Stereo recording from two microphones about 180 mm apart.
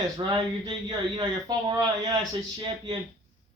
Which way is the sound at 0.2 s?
25° right (ahead or behind).